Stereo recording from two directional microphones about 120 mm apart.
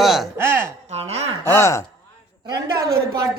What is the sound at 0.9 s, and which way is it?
Speech, 60° right (ahead or behind).